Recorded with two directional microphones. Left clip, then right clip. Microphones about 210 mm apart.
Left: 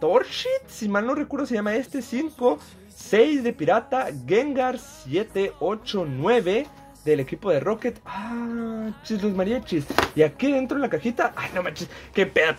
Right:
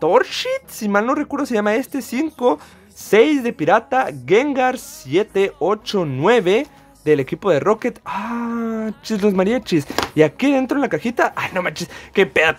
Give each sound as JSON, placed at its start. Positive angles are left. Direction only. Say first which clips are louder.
{"t": 0.0, "sound": "speech", "louder": "right 5 dB", "side_deg": -30}